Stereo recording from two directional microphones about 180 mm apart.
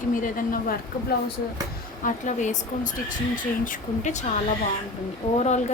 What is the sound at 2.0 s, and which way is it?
Speech, 45° left (ahead or behind).